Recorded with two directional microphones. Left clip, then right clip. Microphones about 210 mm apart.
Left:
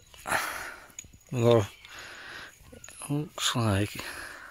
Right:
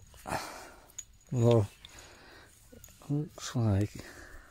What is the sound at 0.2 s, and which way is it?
Sniff, 10° right (ahead or behind).